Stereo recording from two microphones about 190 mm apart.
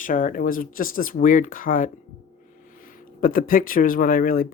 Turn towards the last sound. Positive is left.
turn(degrees=50)  # may be behind; listen again after turning